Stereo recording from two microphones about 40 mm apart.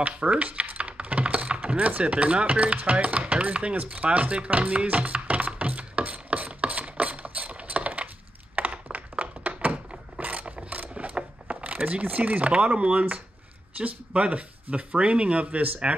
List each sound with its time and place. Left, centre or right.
0.2 s speech: right
0.5 s typing: right
8.6 s a sound: right
8.9 s thunk: right
10.2 s mechanisms: right
13.7 s speech: right